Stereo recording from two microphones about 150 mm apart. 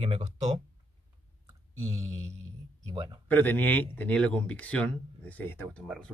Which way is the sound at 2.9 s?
30° right (ahead or behind).